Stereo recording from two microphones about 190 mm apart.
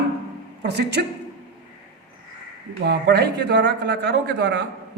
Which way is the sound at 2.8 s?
60° right (ahead or behind).